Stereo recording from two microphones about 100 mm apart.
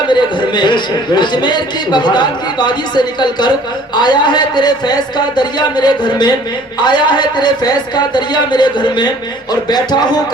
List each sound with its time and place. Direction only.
0.1 s a man's voice: 50° left (ahead or behind)